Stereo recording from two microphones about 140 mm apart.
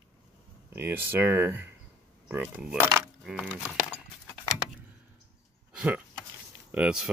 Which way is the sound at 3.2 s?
10° right (ahead or behind).